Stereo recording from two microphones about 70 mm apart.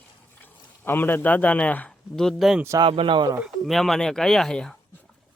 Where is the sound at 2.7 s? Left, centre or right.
Right.